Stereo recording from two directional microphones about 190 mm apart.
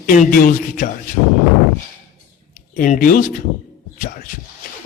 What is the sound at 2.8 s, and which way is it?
Speech, 45° left (ahead or behind).